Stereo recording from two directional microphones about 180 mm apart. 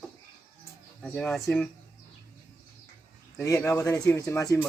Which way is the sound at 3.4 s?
15° left (ahead or behind).